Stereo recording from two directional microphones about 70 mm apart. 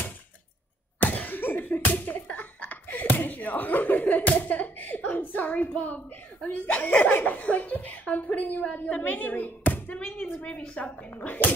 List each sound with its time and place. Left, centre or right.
0.9 s slap: left
2.2 s speech: left
10.0 s a woman's voice: centre
10.8 s speech: left